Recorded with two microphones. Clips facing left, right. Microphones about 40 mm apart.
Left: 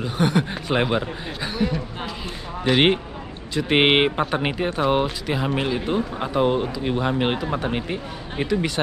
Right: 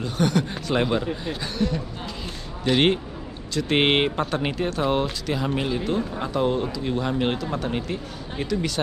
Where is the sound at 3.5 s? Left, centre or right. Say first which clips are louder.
Left 3 dB; centre.